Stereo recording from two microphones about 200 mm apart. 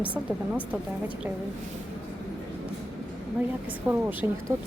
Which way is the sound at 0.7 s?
5° right (ahead or behind).